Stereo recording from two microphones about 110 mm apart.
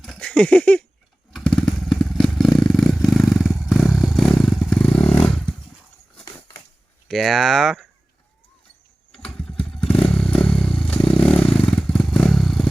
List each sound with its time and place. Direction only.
0.0 s a sound: 5° left (ahead or behind)
1.3 s motorcycle: 5° left (ahead or behind)
4.7 s vehicle: 10° left (ahead or behind)
7.1 s speech: centre (ahead or behind)
9.1 s motorcycle: 5° left (ahead or behind)